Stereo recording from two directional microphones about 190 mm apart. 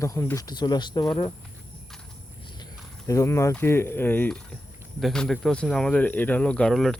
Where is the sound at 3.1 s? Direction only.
15° left (ahead or behind).